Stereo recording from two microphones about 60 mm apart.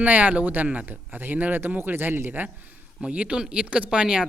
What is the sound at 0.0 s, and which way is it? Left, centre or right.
Speech, right.